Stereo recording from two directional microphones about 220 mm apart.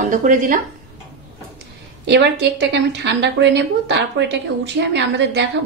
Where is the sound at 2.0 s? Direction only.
50° right (ahead or behind).